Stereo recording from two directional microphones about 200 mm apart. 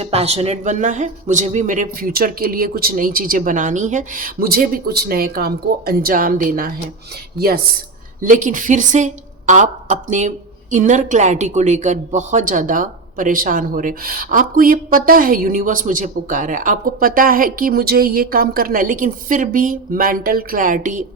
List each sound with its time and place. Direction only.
0.0 s speech: 30° right (ahead or behind)
8.2 s a woman's voice: 40° right (ahead or behind)